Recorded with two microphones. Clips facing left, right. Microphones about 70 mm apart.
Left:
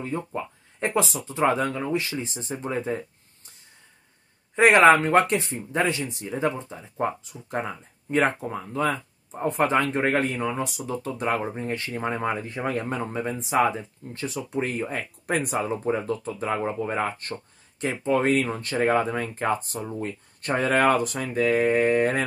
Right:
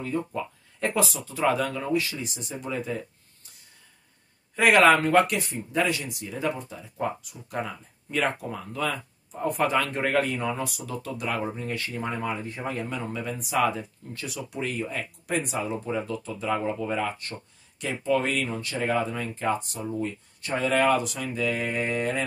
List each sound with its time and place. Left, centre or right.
0.0 s speech: left
4.6 s speech: left
20.1 s speech: left